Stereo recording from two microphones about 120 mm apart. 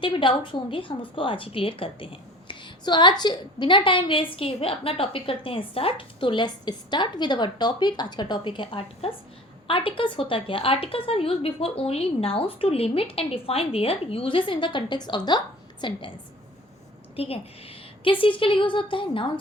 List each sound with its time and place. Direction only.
0.0 s a woman's voice: 45° left (ahead or behind)
17.2 s a woman's voice: 55° left (ahead or behind)